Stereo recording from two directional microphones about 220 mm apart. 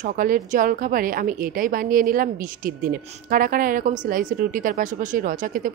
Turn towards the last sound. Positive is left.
turn(degrees=-40)  # may be behind; listen again after turning